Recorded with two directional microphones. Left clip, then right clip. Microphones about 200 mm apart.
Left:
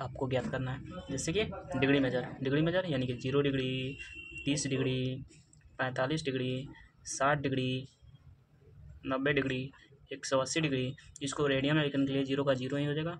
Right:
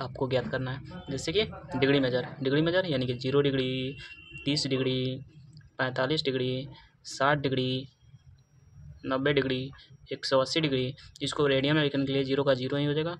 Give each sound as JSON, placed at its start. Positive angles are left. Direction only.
{"t": 0.0, "sound": "a man's voice", "side_deg": -30}
{"t": 9.0, "sound": "speech", "side_deg": -30}